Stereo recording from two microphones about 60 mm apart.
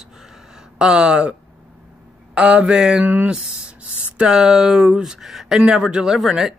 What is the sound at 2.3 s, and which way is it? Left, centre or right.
Speech, centre.